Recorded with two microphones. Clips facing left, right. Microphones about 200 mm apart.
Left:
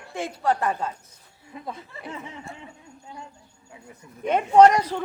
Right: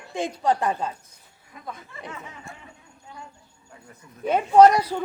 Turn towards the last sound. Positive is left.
turn(degrees=-10)  # may be behind; listen again after turning